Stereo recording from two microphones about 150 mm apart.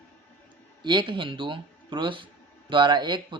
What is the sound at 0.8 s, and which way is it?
Speech, 30° right (ahead or behind).